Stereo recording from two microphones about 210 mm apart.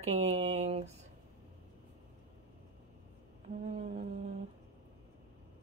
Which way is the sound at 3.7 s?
35° right (ahead or behind).